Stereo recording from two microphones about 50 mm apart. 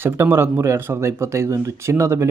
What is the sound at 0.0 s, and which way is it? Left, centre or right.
Speech, right.